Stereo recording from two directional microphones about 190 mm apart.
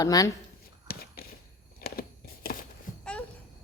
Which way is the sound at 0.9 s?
50° left (ahead or behind).